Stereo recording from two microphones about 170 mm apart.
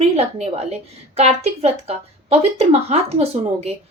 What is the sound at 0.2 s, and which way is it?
A woman's voice, 40° right (ahead or behind).